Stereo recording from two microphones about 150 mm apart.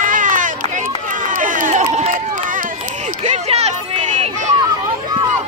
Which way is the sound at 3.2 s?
45° right (ahead or behind).